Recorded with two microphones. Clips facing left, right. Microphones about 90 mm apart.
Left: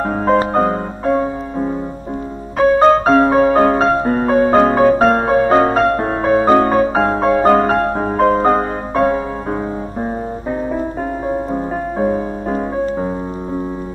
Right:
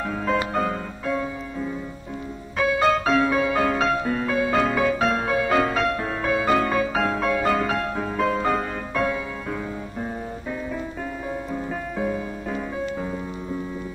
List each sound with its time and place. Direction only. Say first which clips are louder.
0.0 s music: left 9 dB; 40° left (ahead or behind)
11.2 s music: left 9 dB; 40° left (ahead or behind)